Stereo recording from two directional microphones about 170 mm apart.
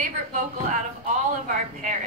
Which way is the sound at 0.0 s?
45° right (ahead or behind).